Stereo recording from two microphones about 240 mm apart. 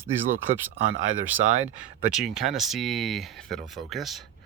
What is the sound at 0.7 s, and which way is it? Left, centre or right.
Speech, right.